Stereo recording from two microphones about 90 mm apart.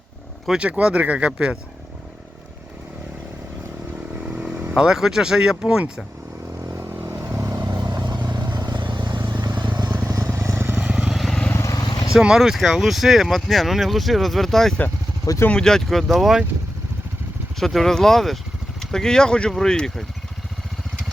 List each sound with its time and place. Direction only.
0.4 s speech: 10° right (ahead or behind)
4.3 s speech: 10° right (ahead or behind)
6.7 s vehicle: 25° right (ahead or behind)
7.5 s vehicle: 45° right (ahead or behind)
10.1 s motorcycle: 40° right (ahead or behind)
10.3 s vehicle: 30° right (ahead or behind)
10.8 s vehicle: 10° right (ahead or behind)
11.1 s vehicle: centre (ahead or behind)
11.5 s vehicle: 35° left (ahead or behind)
12.1 s speech: 5° right (ahead or behind)
17.6 s speech: 5° left (ahead or behind)